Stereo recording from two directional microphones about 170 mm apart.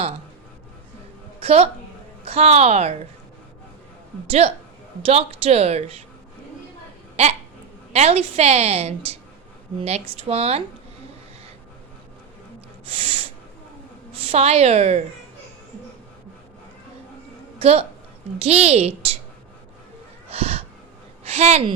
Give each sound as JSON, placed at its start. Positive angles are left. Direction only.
{"t": 1.4, "sound": "a woman's voice", "side_deg": -35}
{"t": 4.3, "sound": "a woman's voice", "side_deg": -35}
{"t": 7.2, "sound": "a woman's voice", "side_deg": -40}
{"t": 13.0, "sound": "a woman's voice", "side_deg": -35}
{"t": 17.6, "sound": "a woman's voice", "side_deg": -35}
{"t": 20.3, "sound": "a sound", "side_deg": -35}
{"t": 21.2, "sound": "speech", "side_deg": -40}